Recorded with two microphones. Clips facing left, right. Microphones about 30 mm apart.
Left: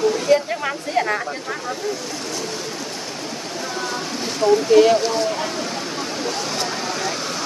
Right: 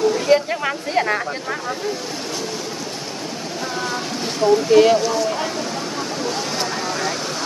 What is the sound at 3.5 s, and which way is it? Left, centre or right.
Vehicle, centre.